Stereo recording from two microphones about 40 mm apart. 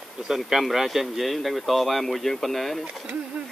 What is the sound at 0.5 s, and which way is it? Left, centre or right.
Speech, centre.